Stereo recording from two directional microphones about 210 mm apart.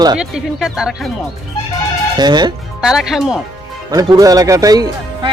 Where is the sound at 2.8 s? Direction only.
Centre (ahead or behind).